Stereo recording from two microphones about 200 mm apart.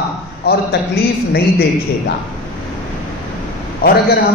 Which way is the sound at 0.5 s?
55° left (ahead or behind).